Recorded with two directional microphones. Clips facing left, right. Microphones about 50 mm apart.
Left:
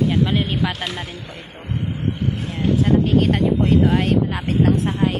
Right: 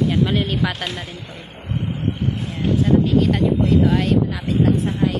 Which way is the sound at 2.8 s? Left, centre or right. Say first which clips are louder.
Right 1 dB; left.